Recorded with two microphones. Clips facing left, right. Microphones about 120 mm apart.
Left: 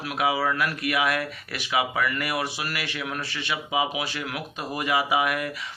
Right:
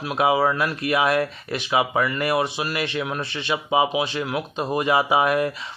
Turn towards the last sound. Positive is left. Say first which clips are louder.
# right 5 dB
turn(degrees=-30)  # may be behind; listen again after turning